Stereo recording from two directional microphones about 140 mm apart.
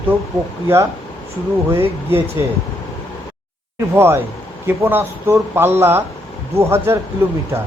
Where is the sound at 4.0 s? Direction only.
15° right (ahead or behind).